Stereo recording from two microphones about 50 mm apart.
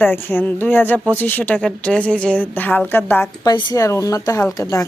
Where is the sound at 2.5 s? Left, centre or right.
Left.